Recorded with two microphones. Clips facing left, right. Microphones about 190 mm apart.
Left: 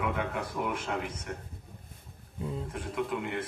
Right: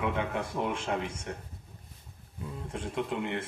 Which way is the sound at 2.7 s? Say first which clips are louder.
Right 3 dB; 25° right (ahead or behind).